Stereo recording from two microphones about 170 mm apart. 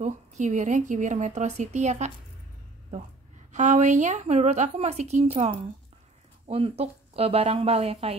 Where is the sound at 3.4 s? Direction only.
45° right (ahead or behind).